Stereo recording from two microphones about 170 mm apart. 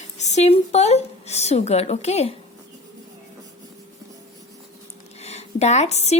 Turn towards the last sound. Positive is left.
turn(degrees=40)  # may be behind; listen again after turning